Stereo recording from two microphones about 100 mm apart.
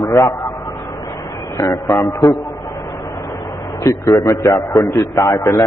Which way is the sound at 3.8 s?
35° left (ahead or behind).